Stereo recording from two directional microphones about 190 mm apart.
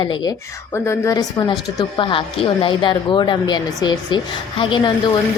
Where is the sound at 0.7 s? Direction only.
15° left (ahead or behind).